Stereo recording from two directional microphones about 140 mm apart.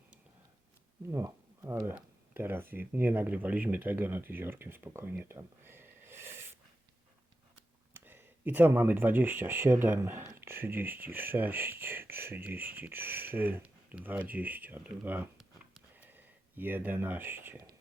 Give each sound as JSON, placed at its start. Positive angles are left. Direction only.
{"t": 1.1, "sound": "speech", "side_deg": -20}
{"t": 7.9, "sound": "speech", "side_deg": -15}
{"t": 15.4, "sound": "a sound", "side_deg": 0}
{"t": 16.0, "sound": "speech", "side_deg": -15}